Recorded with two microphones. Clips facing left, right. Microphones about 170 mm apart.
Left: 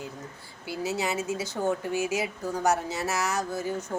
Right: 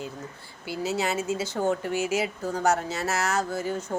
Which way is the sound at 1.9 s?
15° left (ahead or behind).